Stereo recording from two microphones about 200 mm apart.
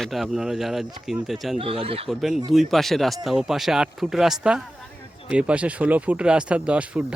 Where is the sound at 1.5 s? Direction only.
30° right (ahead or behind).